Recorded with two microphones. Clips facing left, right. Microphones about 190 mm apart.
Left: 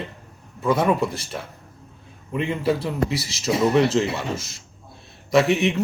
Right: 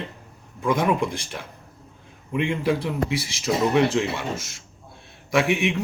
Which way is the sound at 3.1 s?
10° right (ahead or behind).